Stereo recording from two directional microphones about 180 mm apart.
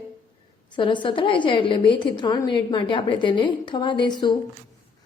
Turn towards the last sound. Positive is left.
turn(degrees=25)  # may be behind; listen again after turning